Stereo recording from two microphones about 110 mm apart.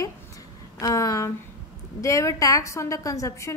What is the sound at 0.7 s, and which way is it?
A woman's voice, 30° left (ahead or behind).